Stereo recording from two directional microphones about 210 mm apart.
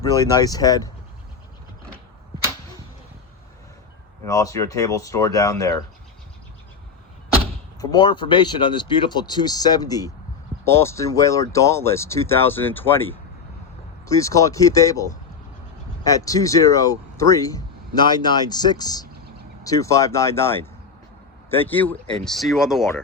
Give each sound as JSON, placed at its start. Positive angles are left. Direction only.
{"t": 0.0, "sound": "speech", "side_deg": 15}
{"t": 4.3, "sound": "speech", "side_deg": 15}
{"t": 7.8, "sound": "speech", "side_deg": 20}
{"t": 16.0, "sound": "speech", "side_deg": 15}